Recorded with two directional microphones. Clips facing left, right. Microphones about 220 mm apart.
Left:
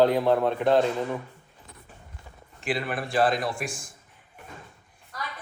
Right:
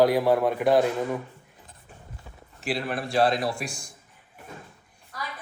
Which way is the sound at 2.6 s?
Centre (ahead or behind).